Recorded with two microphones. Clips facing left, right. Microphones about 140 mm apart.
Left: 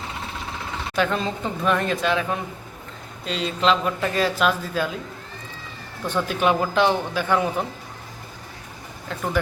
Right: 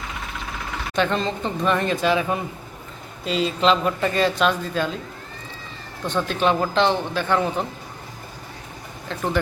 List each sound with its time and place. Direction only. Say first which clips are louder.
0.0 s vehicle: even; 30° left (ahead or behind)
0.9 s speech: right 1 dB; 5° left (ahead or behind)
6.1 s speech: even; 10° left (ahead or behind)
9.0 s speech: right 1 dB; 5° left (ahead or behind)